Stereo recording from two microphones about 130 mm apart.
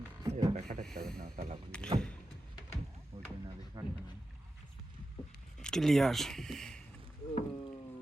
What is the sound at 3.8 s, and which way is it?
Rowboat, 25° right (ahead or behind).